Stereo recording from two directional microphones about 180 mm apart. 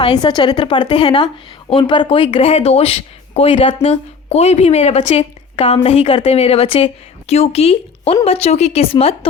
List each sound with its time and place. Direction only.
0.0 s a woman's voice: 25° left (ahead or behind)